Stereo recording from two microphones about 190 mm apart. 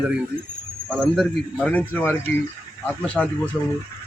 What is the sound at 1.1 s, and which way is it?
A man's voice, 5° left (ahead or behind).